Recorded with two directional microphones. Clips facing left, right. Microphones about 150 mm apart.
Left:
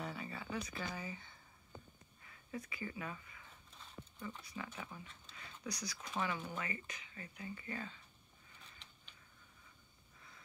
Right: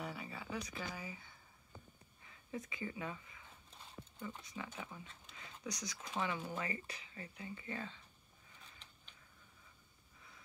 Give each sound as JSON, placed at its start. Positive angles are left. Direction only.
{"t": 0.0, "sound": "a sound", "side_deg": -10}
{"t": 2.2, "sound": "speech", "side_deg": -20}
{"t": 6.6, "sound": "speech", "side_deg": -30}